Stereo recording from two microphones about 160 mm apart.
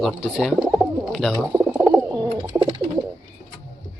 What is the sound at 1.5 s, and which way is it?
Bird, 15° right (ahead or behind).